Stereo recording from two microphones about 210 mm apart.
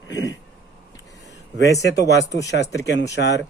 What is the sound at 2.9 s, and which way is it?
Speech, 55° left (ahead or behind).